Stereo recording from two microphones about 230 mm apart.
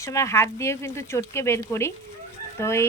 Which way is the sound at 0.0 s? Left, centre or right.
Centre.